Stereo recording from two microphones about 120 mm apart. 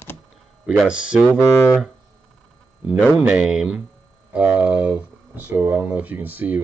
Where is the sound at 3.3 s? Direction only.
5° right (ahead or behind).